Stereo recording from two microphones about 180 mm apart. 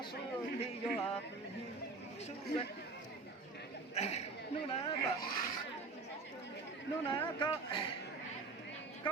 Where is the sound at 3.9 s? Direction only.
40° left (ahead or behind).